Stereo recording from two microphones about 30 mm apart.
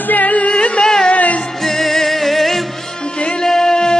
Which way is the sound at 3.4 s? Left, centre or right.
Centre.